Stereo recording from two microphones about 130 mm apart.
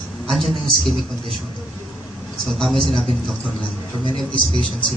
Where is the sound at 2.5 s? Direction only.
5° left (ahead or behind).